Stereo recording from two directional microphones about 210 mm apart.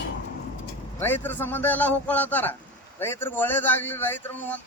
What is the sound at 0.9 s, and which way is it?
A man's voice, 10° left (ahead or behind).